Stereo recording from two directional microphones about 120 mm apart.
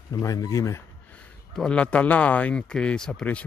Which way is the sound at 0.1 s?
30° left (ahead or behind).